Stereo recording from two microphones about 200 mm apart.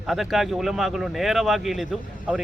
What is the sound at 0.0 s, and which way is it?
Speech, centre (ahead or behind).